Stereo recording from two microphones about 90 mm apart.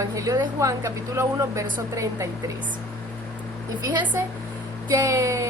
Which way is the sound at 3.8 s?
55° right (ahead or behind).